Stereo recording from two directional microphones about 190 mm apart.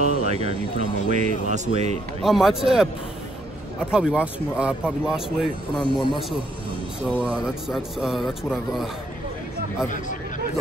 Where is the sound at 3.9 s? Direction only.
5° right (ahead or behind).